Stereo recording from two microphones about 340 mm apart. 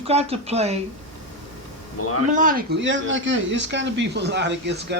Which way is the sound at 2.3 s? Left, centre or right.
Right.